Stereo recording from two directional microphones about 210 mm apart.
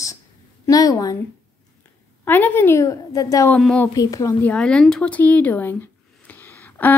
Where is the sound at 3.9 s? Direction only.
15° left (ahead or behind).